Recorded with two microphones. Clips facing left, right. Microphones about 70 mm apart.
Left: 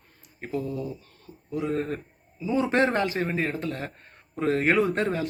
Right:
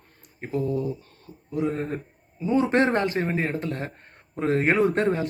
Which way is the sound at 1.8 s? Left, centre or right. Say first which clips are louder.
Left 1 dB; centre.